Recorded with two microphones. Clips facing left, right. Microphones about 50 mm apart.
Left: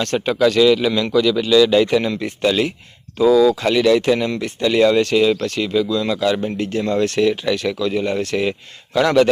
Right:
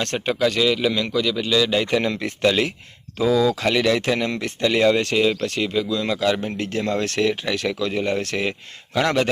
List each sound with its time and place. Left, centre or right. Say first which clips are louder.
0.0 s speech: left 4 dB; right
0.3 s a man's voice: left 7 dB; centre
1.9 s speech: left 3 dB; right
2.2 s speech: left 2 dB; right
3.2 s speech: left 6 dB; left
3.7 s speech: left 5 dB; right
4.6 s speech: left 3 dB; right
5.2 s speech: left 3 dB; centre
6.1 s speech: left 3 dB; right
6.7 s speech: left 1 dB; right
7.0 s speech: left 5 dB; right
8.2 s speech: left 5 dB; right
9.0 s speech: left 6 dB; right